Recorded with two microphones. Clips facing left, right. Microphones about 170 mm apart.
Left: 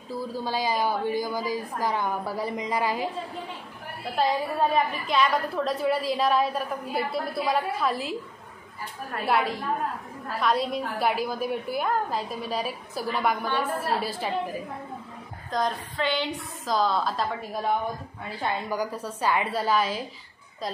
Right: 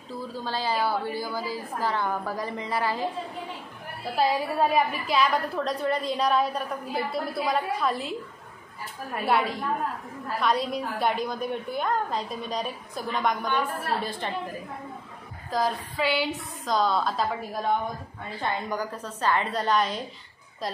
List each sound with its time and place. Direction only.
0.4 s a woman's voice: 10° left (ahead or behind)
4.6 s a woman's voice: 5° right (ahead or behind)
9.2 s a woman's voice: centre (ahead or behind)
15.5 s a woman's voice: 5° right (ahead or behind)